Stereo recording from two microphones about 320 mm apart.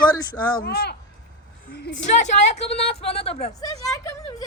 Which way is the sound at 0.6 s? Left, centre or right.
Left.